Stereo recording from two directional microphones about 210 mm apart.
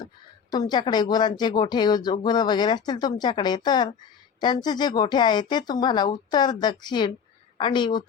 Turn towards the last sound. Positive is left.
turn(degrees=20)  # may be behind; listen again after turning